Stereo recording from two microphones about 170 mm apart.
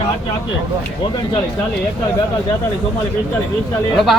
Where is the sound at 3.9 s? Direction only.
Centre (ahead or behind).